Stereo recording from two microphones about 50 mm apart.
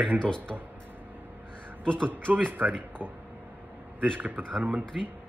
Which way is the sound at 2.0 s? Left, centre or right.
Right.